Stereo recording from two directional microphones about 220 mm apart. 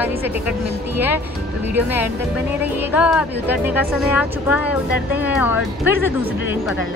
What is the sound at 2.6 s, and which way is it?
Speech, 5° right (ahead or behind).